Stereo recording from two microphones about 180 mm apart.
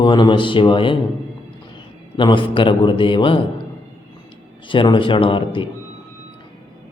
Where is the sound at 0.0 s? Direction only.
25° left (ahead or behind).